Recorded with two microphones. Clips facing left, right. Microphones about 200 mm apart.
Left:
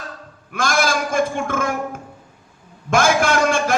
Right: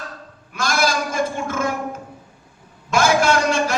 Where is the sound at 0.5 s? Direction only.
50° left (ahead or behind).